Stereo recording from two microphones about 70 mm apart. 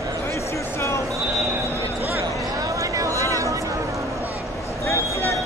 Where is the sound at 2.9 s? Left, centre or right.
Right.